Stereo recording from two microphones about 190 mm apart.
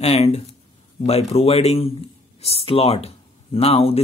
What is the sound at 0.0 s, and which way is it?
Speech, 35° left (ahead or behind).